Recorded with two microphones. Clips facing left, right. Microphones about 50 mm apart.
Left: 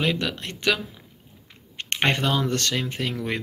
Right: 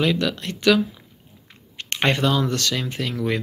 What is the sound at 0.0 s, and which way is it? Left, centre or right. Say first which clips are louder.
Speech: right 4 dB; left.